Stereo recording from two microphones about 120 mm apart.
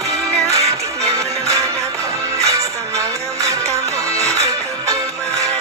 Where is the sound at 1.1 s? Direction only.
25° right (ahead or behind).